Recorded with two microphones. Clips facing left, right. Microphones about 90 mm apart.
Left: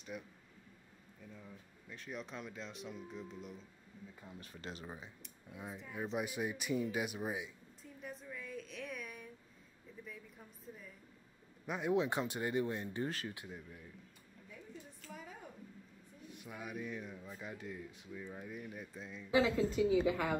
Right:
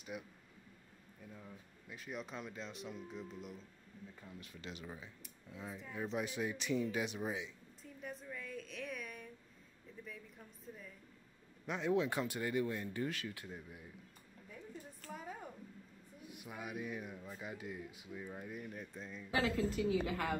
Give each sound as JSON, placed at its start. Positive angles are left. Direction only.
{"t": 0.1, "sound": "speech", "side_deg": -5}
{"t": 4.1, "sound": "speech", "side_deg": 10}
{"t": 4.4, "sound": "speech", "side_deg": 40}
{"t": 4.8, "sound": "speech", "side_deg": 20}
{"t": 5.8, "sound": "a sound", "side_deg": 5}
{"t": 11.6, "sound": "speech", "side_deg": 5}
{"t": 11.9, "sound": "speech", "side_deg": 20}
{"t": 13.5, "sound": "a man's voice", "side_deg": -10}
{"t": 14.8, "sound": "a sound", "side_deg": -45}
{"t": 16.2, "sound": "speech", "side_deg": -10}